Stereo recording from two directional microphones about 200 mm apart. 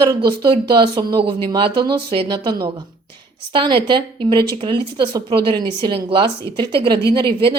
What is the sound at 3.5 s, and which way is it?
Speech, 25° right (ahead or behind).